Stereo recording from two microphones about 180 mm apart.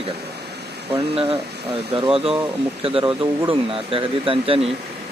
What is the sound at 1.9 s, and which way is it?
Speech, 30° right (ahead or behind).